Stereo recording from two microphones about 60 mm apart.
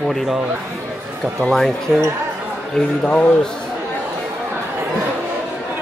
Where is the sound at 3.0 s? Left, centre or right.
Left.